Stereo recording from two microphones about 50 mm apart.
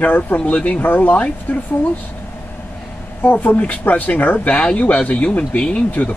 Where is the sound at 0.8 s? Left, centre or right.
Left.